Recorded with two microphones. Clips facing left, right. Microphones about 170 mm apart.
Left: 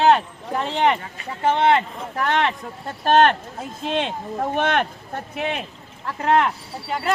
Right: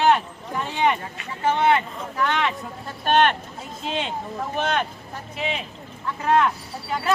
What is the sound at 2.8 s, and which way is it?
Speech, 35° left (ahead or behind).